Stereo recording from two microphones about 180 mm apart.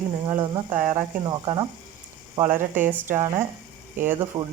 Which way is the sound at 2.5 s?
10° right (ahead or behind).